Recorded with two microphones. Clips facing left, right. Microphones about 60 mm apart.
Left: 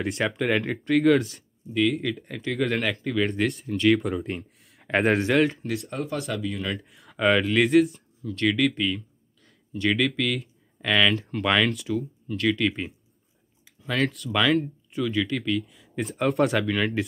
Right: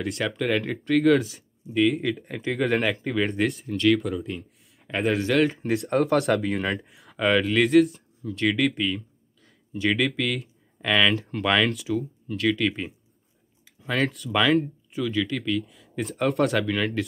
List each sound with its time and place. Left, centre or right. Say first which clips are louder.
0.0 s speech: left 1 dB; centre
4.2 s speech: left 1 dB; left
5.3 s speech: right 3 dB; centre
5.8 s speech: right 9 dB; right
6.8 s speech: left 1 dB; centre
8.2 s speech: even; centre